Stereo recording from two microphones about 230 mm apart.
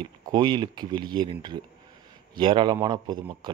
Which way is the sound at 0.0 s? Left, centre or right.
Centre.